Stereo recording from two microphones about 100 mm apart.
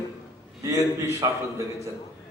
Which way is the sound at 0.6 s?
35° right (ahead or behind).